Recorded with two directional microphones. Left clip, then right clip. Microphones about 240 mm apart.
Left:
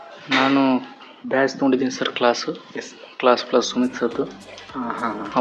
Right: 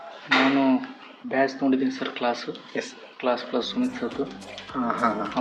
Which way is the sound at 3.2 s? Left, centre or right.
Left.